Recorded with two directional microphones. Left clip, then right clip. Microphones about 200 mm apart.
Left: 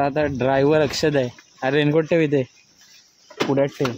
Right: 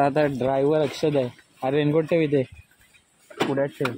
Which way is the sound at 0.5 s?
25° left (ahead or behind).